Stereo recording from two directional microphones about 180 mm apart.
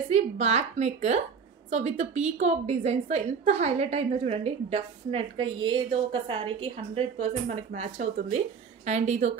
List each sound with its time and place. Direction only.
0.1 s a woman's voice: 35° right (ahead or behind)